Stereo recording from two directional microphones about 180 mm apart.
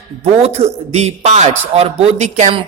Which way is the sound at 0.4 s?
35° right (ahead or behind).